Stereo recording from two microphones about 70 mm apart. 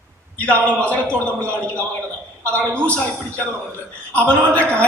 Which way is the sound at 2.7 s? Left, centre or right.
Centre.